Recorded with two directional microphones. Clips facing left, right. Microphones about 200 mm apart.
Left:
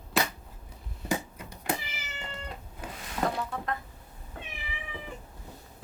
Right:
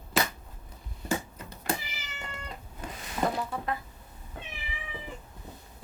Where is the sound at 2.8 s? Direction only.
5° left (ahead or behind).